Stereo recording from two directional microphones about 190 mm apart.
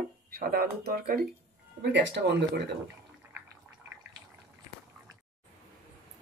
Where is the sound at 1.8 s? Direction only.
70° right (ahead or behind).